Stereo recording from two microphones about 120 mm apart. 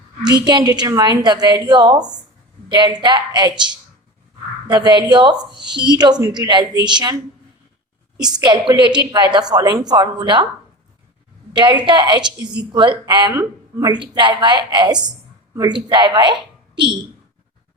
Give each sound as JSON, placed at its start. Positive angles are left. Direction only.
{"t": 0.3, "sound": "a woman's voice", "side_deg": -35}
{"t": 8.2, "sound": "a woman's voice", "side_deg": -35}
{"t": 11.5, "sound": "a woman's voice", "side_deg": -40}
{"t": 13.3, "sound": "speech", "side_deg": -25}
{"t": 13.9, "sound": "a woman's voice", "side_deg": -40}